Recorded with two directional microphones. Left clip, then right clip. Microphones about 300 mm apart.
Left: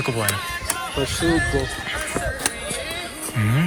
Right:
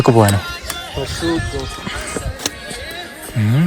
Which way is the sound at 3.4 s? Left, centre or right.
Centre.